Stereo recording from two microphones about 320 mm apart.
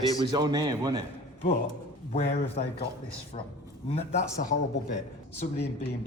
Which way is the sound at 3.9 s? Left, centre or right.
Centre.